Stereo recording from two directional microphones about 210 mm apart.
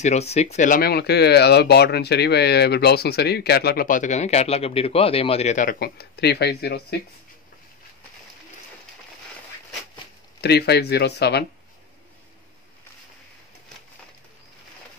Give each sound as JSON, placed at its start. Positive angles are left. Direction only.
{"t": 0.0, "sound": "speech", "side_deg": 30}
{"t": 10.4, "sound": "speech", "side_deg": 50}